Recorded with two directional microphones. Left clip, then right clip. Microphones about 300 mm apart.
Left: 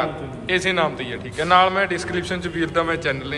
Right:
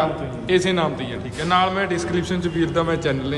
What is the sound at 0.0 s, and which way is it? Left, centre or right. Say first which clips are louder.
A man's voice: right 3 dB; centre.